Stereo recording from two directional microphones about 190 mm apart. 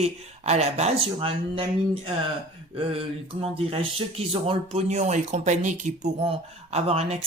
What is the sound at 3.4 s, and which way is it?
Speech, 30° right (ahead or behind).